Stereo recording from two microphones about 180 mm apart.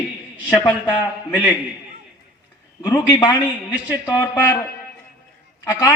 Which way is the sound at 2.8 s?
15° left (ahead or behind).